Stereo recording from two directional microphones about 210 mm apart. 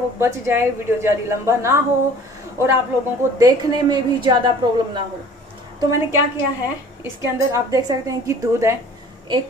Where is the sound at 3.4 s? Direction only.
15° right (ahead or behind).